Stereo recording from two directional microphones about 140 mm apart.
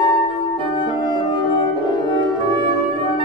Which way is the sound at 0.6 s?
35° left (ahead or behind).